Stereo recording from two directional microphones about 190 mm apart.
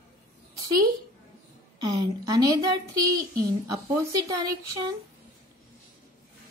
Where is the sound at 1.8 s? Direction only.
20° right (ahead or behind).